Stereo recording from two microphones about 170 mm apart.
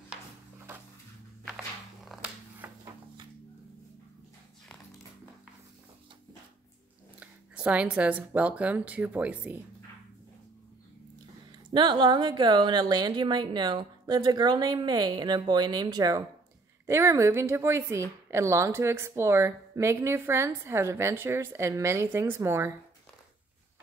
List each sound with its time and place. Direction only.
2.0 s a sound: 10° right (ahead or behind)
7.2 s speech: 10° right (ahead or behind)
11.7 s a woman's voice: 25° right (ahead or behind)